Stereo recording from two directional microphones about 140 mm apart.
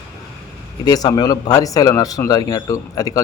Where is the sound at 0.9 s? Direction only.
30° left (ahead or behind).